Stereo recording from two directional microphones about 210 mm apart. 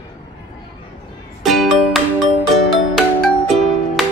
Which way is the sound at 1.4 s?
Centre (ahead or behind).